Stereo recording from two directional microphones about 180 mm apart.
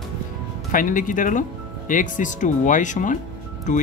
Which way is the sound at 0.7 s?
50° left (ahead or behind).